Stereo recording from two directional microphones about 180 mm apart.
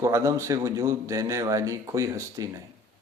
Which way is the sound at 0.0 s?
15° right (ahead or behind).